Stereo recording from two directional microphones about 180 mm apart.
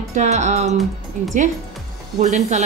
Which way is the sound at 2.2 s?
40° right (ahead or behind).